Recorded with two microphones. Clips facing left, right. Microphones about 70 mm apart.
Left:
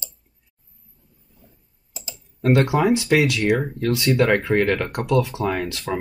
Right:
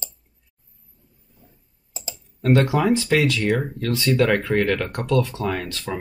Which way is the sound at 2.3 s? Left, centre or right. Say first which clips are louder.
Left 1 dB; centre.